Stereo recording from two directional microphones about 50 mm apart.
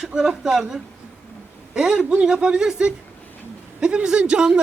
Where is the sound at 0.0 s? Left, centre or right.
Centre.